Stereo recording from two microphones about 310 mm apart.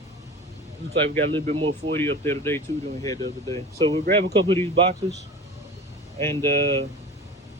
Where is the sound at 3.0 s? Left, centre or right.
Centre.